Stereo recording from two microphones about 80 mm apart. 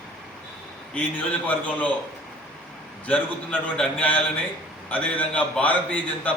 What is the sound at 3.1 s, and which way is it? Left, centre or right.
A man's voice, centre.